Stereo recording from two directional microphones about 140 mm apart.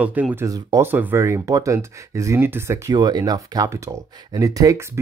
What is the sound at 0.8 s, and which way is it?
Speech, 15° right (ahead or behind).